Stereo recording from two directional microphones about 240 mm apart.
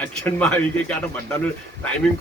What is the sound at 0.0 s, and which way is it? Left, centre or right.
Speech, centre.